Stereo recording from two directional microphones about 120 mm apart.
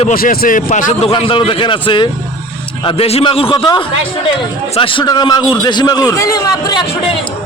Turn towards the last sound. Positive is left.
turn(degrees=30)  # may be behind; listen again after turning